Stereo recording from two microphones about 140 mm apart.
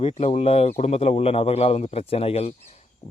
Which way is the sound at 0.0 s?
50° left (ahead or behind).